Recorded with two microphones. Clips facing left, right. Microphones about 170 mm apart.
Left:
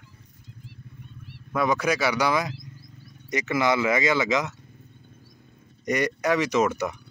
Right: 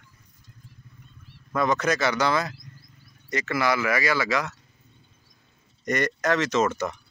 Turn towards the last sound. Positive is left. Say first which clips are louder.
# left 1 dB
turn(degrees=10)  # may be behind; listen again after turning